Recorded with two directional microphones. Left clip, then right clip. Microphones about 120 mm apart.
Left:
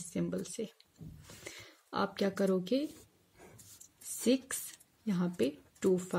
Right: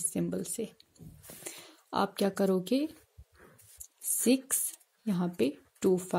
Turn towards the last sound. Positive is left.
turn(degrees=-30)  # may be behind; listen again after turning